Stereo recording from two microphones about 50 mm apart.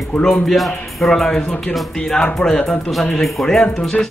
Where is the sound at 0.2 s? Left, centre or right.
Centre.